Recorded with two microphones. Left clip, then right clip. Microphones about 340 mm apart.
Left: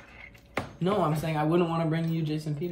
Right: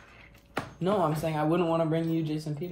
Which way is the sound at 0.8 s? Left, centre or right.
Centre.